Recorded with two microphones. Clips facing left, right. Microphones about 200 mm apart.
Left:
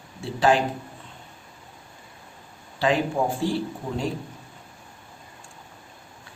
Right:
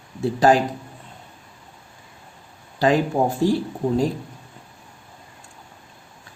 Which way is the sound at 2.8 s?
40° right (ahead or behind).